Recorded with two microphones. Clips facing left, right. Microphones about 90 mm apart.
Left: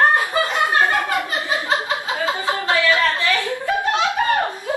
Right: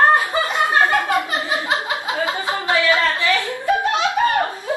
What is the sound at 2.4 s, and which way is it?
Speech, 20° right (ahead or behind).